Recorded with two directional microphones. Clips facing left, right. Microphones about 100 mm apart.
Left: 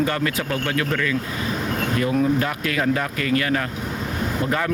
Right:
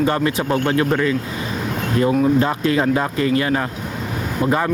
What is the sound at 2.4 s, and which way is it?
Speech, 25° right (ahead or behind).